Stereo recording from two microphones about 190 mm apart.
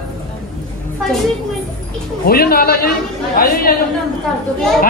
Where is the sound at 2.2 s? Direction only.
55° left (ahead or behind).